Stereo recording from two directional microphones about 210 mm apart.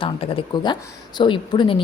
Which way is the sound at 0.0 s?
25° left (ahead or behind).